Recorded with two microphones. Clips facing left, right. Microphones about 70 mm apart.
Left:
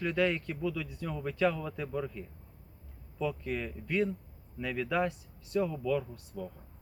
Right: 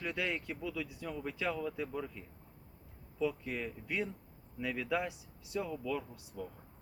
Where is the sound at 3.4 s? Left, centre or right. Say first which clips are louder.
Left 4 dB; left.